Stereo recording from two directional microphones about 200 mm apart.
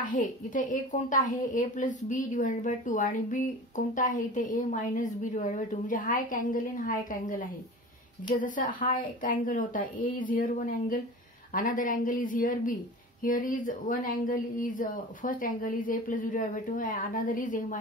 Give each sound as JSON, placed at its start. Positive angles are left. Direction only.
{"t": 0.1, "sound": "a woman's voice", "side_deg": 40}